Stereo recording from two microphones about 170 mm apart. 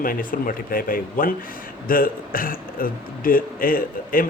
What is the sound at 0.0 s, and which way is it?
Speech, 55° left (ahead or behind).